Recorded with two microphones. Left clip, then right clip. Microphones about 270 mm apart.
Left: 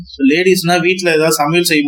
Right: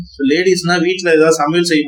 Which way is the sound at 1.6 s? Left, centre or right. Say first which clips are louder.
Left 1 dB; centre.